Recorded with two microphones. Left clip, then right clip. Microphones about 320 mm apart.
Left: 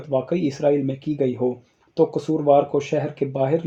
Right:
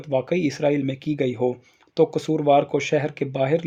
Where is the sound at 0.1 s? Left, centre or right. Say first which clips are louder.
Even; right.